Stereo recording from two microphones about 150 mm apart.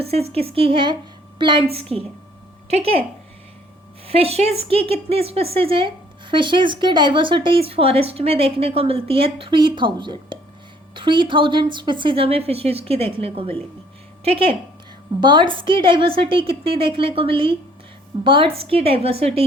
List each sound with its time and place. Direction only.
0.0 s a woman's voice: 40° right (ahead or behind)
4.0 s speech: 40° right (ahead or behind)
15.2 s speech: 30° right (ahead or behind)